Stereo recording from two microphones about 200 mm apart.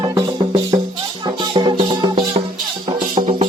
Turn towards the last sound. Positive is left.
turn(degrees=-25)  # may be behind; listen again after turning